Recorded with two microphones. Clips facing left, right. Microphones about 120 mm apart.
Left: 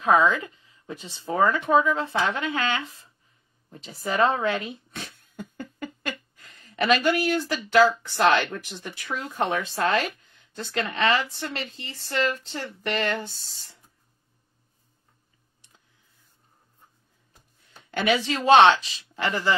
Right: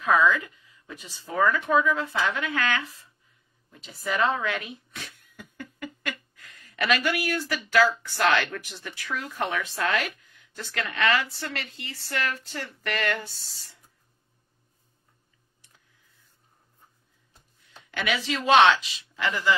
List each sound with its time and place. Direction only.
0.0 s speech: 30° left (ahead or behind)
3.7 s a sound: 35° left (ahead or behind)
8.0 s speech: 20° left (ahead or behind)
17.6 s a woman's voice: 35° left (ahead or behind)